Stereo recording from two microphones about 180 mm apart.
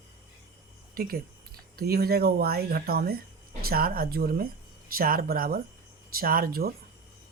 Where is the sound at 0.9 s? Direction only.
55° right (ahead or behind).